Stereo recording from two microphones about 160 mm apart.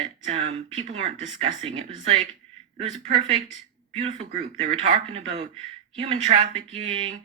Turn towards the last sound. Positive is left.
turn(degrees=-40)  # may be behind; listen again after turning